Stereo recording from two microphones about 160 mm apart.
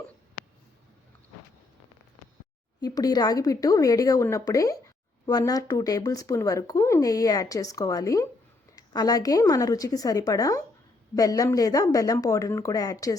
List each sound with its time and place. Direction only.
2.8 s a woman's voice: 25° left (ahead or behind)